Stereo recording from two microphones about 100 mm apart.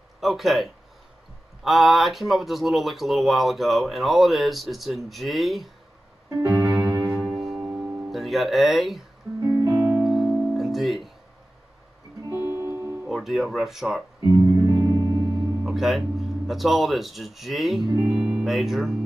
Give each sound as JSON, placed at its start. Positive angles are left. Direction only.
{"t": 0.2, "sound": "speech", "side_deg": 0}
{"t": 6.5, "sound": "keyboard", "side_deg": -25}
{"t": 7.2, "sound": "music", "side_deg": -5}
{"t": 9.7, "sound": "music", "side_deg": -20}
{"t": 9.9, "sound": "music", "side_deg": 0}
{"t": 12.5, "sound": "music", "side_deg": -25}
{"t": 13.1, "sound": "speech", "side_deg": 0}
{"t": 14.2, "sound": "music", "side_deg": -30}
{"t": 15.6, "sound": "speech", "side_deg": 0}